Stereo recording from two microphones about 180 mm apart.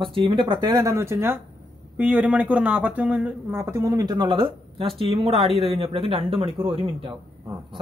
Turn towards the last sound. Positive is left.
turn(degrees=-30)  # may be behind; listen again after turning